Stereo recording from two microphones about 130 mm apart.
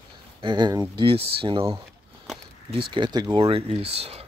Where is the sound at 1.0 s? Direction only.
45° right (ahead or behind).